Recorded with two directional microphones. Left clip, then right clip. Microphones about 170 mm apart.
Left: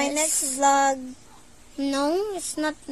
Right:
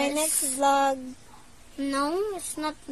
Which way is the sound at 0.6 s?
15° left (ahead or behind).